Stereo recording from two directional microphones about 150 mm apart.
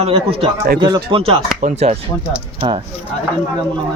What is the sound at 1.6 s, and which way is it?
Speech, 50° right (ahead or behind).